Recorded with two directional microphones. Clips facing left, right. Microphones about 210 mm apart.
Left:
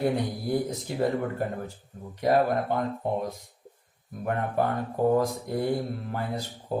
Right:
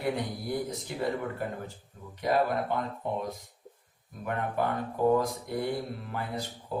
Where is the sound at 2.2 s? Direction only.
45° left (ahead or behind).